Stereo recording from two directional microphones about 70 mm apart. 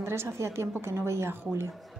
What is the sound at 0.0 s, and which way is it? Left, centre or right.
A woman's voice, right.